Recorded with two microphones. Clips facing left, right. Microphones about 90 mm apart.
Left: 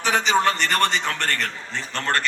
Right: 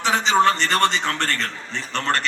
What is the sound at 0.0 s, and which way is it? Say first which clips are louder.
A man's voice: right 2 dB; 25° right (ahead or behind).